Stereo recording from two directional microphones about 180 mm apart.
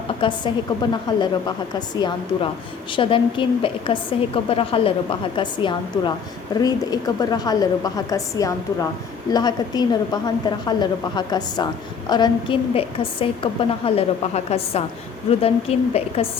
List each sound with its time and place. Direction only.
0.2 s a woman's voice: 25° left (ahead or behind)